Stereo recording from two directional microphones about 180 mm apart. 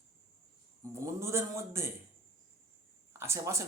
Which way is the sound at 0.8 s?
15° right (ahead or behind).